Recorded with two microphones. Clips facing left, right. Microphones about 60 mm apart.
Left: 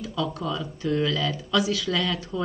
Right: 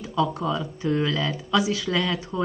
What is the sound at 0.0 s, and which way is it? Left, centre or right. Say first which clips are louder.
Speech: right 4 dB; right.